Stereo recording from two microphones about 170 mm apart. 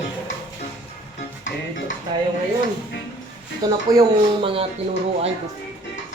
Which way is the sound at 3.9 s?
20° right (ahead or behind).